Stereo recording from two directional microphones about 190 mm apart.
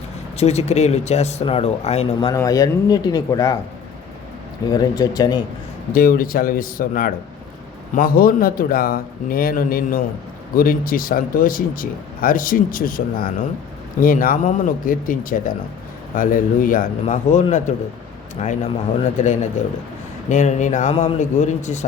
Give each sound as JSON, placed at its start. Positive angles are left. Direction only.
{"t": 0.3, "sound": "speech", "side_deg": 35}
{"t": 2.3, "sound": "speech", "side_deg": 20}
{"t": 4.7, "sound": "speech", "side_deg": 20}
{"t": 5.9, "sound": "speech", "side_deg": 50}